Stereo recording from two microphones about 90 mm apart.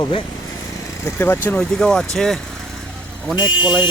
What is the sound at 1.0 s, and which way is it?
Speech, 30° left (ahead or behind).